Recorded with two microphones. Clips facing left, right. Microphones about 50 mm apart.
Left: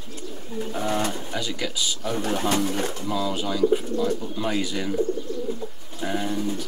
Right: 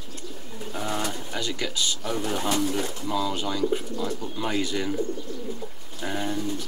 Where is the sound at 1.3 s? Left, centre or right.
Centre.